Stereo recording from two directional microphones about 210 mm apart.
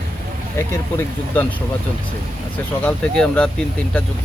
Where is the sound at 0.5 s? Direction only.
10° left (ahead or behind).